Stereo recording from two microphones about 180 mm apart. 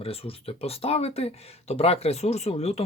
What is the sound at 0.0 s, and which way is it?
Speech, 30° left (ahead or behind).